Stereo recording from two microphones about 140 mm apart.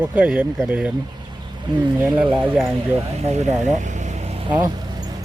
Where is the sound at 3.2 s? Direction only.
55° right (ahead or behind); by 4.7 s 35° right (ahead or behind).